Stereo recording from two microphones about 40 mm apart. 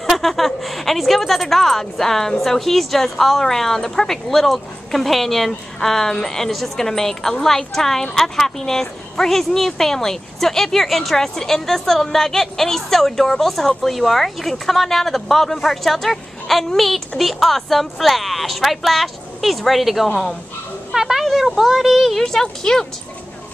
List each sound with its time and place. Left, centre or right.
0.0 s a woman's voice: centre
20.9 s a sound: centre
21.3 s a woman's voice: centre
22.2 s speech: centre